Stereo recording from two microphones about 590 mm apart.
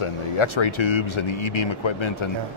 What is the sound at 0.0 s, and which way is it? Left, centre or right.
Speech, left.